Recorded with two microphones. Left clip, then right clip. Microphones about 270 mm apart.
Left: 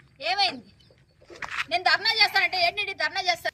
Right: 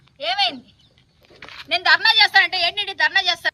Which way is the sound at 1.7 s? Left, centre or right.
Centre.